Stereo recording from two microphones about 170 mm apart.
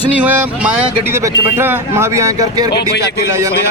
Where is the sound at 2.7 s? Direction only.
75° left (ahead or behind).